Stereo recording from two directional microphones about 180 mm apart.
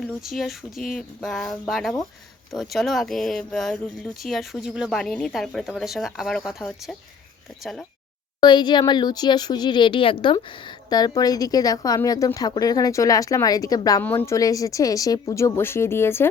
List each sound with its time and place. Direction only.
0.2 s a woman's voice: centre (ahead or behind)
8.4 s a woman's voice: 25° left (ahead or behind)